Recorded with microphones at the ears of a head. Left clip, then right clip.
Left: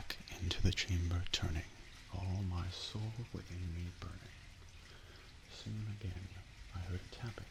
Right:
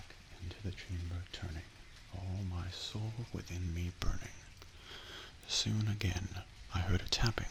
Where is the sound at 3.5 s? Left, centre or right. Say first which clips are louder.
Right 5 dB; right.